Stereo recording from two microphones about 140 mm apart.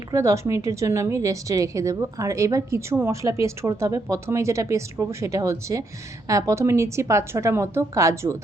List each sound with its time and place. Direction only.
0.1 s a woman's voice: 20° right (ahead or behind)